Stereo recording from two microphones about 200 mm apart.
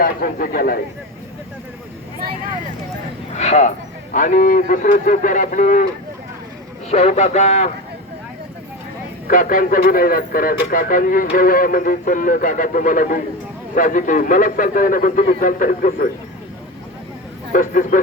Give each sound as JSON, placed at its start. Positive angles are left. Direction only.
{"t": 0.0, "sound": "a man's voice", "side_deg": 45}
{"t": 3.3, "sound": "a man's voice", "side_deg": 35}
{"t": 6.9, "sound": "a man's voice", "side_deg": 35}
{"t": 9.2, "sound": "a man's voice", "side_deg": 40}
{"t": 17.5, "sound": "a man's voice", "side_deg": 40}